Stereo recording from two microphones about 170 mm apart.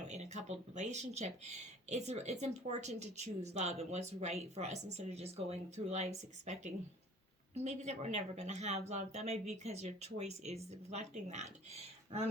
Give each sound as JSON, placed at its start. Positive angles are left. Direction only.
{"t": 0.1, "sound": "speech", "side_deg": -40}